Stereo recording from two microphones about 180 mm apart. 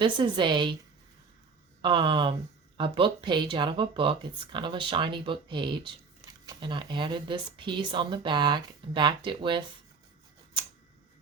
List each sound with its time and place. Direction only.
0.0 s a woman's voice: 25° right (ahead or behind)
1.8 s a woman's voice: 30° right (ahead or behind)